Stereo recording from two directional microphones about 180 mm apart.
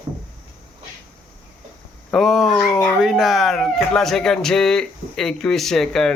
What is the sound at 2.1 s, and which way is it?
Speech, centre (ahead or behind).